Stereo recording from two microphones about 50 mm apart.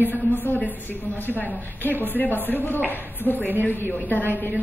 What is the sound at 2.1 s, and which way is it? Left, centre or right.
A woman's voice, left.